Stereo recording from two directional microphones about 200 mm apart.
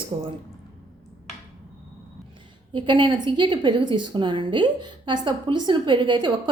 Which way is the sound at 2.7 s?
25° right (ahead or behind).